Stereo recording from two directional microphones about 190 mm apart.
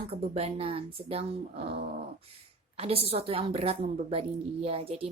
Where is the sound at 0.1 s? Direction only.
30° right (ahead or behind).